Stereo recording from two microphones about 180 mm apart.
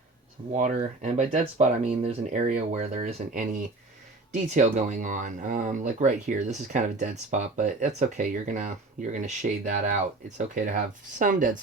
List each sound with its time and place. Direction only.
0.5 s speech: 40° right (ahead or behind)